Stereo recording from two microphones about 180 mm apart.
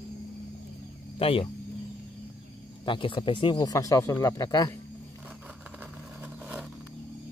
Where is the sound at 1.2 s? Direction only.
30° left (ahead or behind).